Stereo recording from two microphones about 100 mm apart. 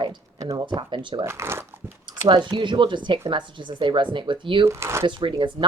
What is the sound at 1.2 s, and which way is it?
Speech, 25° right (ahead or behind).